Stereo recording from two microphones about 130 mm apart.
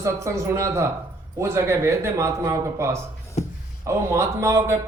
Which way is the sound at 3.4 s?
60° left (ahead or behind).